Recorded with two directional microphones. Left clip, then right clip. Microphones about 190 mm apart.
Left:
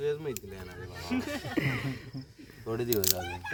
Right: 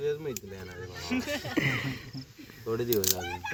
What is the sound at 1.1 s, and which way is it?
Speech, 55° left (ahead or behind).